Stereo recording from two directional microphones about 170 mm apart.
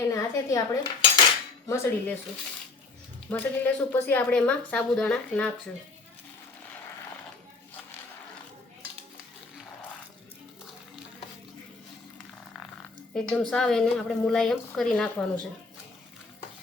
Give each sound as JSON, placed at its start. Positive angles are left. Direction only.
{"t": 0.1, "sound": "cutlery", "side_deg": 20}
{"t": 1.6, "sound": "speech", "side_deg": 15}
{"t": 3.2, "sound": "speech", "side_deg": 10}
{"t": 13.1, "sound": "a woman's voice", "side_deg": 5}